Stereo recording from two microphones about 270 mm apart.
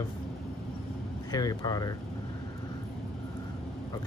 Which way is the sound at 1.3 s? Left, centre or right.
Centre.